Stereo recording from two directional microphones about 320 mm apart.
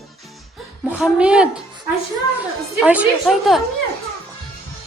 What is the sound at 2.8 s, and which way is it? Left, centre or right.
Speech, centre.